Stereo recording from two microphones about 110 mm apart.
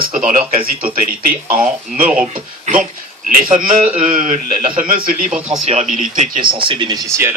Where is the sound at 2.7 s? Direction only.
90° right.